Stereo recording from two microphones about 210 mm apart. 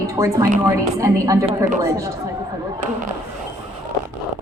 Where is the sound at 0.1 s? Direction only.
15° right (ahead or behind).